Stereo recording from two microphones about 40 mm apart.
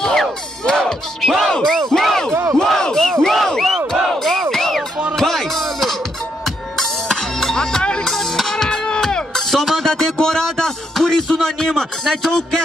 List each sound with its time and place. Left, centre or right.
0.0 s music: centre
1.6 s battle cry: centre
2.0 s a sound: centre
2.2 s battle cry: centre
4.5 s music: centre; by 8.1 s left
8.1 s music: centre
9.8 s a sound: centre